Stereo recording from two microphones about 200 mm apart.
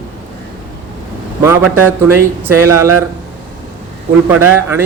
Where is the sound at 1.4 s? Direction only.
10° right (ahead or behind).